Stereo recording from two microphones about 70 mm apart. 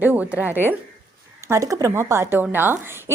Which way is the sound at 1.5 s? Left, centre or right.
Right.